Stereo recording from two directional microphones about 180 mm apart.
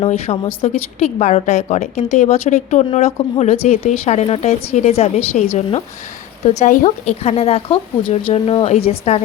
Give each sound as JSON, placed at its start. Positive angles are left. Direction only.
{"t": 0.0, "sound": "a woman's voice", "side_deg": 35}